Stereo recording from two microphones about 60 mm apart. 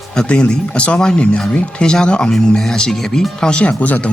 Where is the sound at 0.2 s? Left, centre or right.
Centre.